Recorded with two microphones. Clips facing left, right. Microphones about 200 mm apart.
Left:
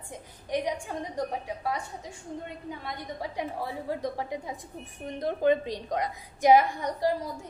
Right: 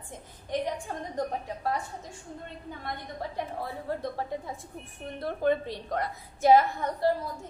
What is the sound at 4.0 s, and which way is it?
A woman's voice, 15° left (ahead or behind).